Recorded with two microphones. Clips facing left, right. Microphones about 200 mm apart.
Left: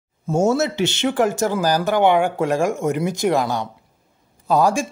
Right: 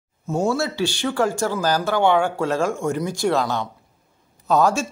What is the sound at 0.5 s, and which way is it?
Speech, 20° left (ahead or behind).